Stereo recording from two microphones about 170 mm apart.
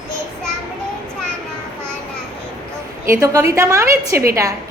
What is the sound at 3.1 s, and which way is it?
A woman's voice, 20° right (ahead or behind).